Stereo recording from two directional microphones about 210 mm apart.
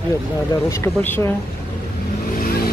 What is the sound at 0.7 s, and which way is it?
Speech, 10° left (ahead or behind).